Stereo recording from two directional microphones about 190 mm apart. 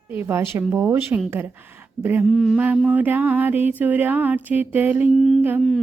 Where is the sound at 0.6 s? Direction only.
10° right (ahead or behind).